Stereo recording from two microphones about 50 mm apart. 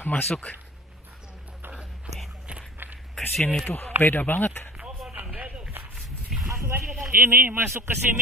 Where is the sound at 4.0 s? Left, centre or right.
Left.